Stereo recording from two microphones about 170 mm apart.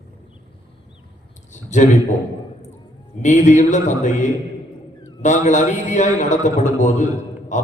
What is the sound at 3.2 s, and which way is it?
A man's voice, 45° left (ahead or behind).